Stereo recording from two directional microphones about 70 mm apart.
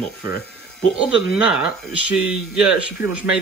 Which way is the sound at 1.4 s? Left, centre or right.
Centre.